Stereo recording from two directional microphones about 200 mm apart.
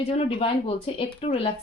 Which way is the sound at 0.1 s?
30° left (ahead or behind).